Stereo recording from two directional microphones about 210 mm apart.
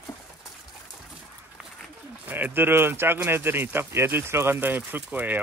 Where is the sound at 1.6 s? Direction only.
5° right (ahead or behind).